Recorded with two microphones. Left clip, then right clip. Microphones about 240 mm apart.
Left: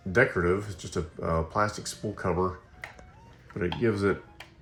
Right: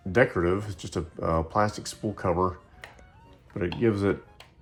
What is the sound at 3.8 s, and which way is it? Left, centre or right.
Speech, right.